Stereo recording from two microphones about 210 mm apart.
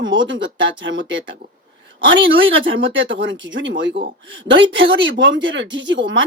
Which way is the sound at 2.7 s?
65° right (ahead or behind).